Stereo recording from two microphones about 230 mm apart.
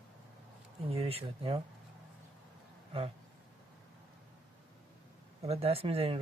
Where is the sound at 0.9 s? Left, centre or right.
Right.